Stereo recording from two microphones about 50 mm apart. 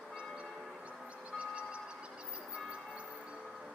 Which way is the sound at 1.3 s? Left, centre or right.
Right.